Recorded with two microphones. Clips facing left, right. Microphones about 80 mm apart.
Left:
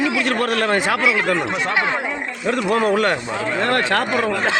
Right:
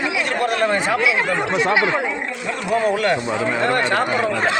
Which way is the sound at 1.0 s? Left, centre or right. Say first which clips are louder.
Left 1 dB; centre.